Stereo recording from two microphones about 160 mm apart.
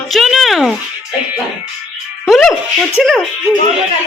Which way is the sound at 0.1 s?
Centre (ahead or behind).